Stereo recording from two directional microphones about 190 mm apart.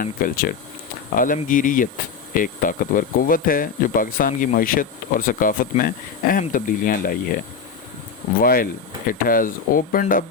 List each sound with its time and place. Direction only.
0.0 s speech: 50° left (ahead or behind)
8.4 s speech: 50° left (ahead or behind)